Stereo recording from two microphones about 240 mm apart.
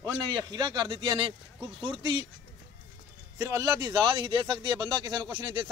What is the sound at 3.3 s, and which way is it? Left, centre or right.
A man's voice, centre.